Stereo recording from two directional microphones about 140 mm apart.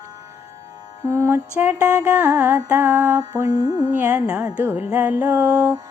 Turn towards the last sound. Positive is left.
turn(degrees=-20)  # may be behind; listen again after turning